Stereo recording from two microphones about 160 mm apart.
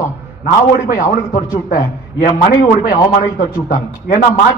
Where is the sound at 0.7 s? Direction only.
60° left (ahead or behind).